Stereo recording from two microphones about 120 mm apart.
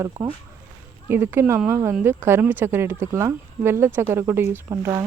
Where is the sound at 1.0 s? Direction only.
20° right (ahead or behind).